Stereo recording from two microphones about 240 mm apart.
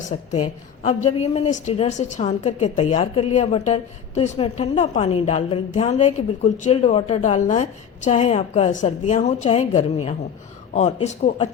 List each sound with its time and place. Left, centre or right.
0.0 s a woman's voice: left